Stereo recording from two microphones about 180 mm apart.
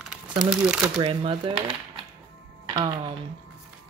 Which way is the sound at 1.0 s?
30° right (ahead or behind).